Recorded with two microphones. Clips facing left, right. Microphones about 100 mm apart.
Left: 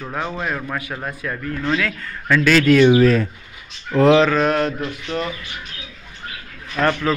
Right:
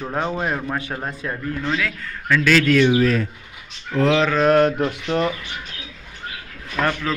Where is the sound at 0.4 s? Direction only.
25° right (ahead or behind).